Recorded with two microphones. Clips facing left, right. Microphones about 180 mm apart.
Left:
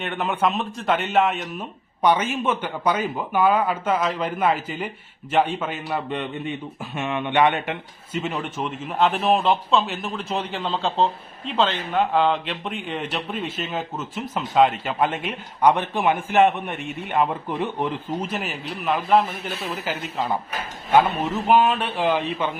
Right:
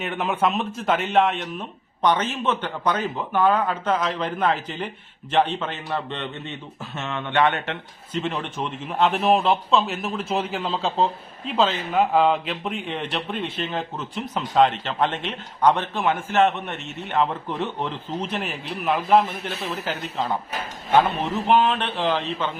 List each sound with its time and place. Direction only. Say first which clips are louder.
0.0 s a man's voice: even; centre (ahead or behind)